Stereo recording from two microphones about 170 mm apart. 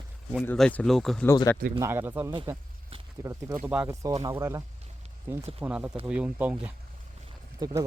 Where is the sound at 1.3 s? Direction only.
20° left (ahead or behind).